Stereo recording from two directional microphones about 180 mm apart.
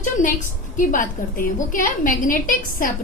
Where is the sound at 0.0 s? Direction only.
45° left (ahead or behind).